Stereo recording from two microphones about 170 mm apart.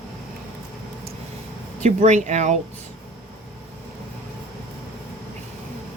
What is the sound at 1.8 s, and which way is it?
Speech, 45° right (ahead or behind).